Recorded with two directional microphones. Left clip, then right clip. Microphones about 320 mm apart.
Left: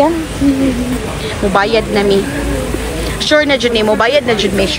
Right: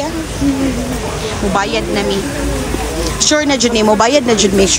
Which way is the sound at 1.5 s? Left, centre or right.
Centre.